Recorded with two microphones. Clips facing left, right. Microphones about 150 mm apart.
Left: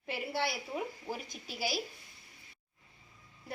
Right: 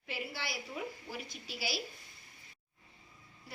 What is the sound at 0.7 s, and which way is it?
A woman's voice, 40° left (ahead or behind).